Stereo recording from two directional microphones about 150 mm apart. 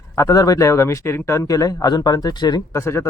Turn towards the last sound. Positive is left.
turn(degrees=20)  # may be behind; listen again after turning